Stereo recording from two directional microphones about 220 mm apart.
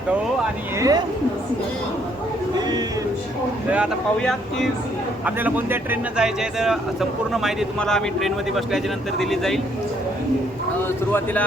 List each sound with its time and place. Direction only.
0.8 s a woman's voice: 15° right (ahead or behind)
2.6 s a sound: 20° right (ahead or behind)
3.7 s speech: centre (ahead or behind)
10.8 s speech: 10° left (ahead or behind)